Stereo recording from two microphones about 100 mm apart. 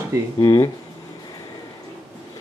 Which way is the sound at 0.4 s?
40° left (ahead or behind).